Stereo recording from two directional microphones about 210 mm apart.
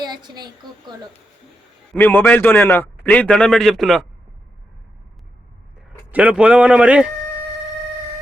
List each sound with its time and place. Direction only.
0.0 s a woman's voice: 20° right (ahead or behind)
2.0 s a man's voice: 10° left (ahead or behind)
6.1 s speech: 5° right (ahead or behind)